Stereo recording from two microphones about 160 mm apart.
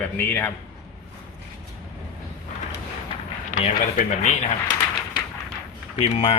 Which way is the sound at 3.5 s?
55° left (ahead or behind).